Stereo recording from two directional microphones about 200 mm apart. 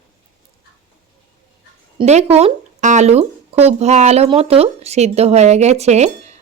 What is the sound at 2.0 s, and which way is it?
Speech, 30° right (ahead or behind).